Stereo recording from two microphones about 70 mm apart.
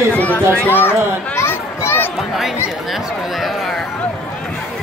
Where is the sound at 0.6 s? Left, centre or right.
Left.